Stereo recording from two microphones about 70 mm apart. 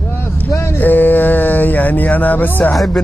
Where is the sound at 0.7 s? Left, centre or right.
Left.